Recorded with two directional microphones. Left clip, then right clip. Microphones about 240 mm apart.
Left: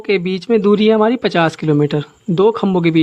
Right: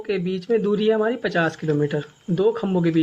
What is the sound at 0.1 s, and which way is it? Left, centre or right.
Speech, left.